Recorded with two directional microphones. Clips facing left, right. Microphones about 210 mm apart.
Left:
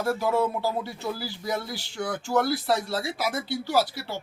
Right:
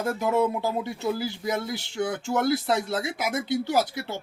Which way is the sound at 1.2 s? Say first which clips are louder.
Right 3 dB; 20° right (ahead or behind).